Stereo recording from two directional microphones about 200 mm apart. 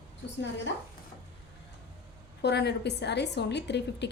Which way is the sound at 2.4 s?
55° left (ahead or behind).